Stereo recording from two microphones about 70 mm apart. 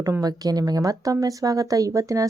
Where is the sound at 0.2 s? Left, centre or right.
Right.